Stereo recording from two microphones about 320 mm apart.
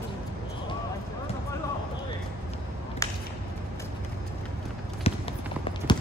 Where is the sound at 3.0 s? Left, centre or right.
Centre.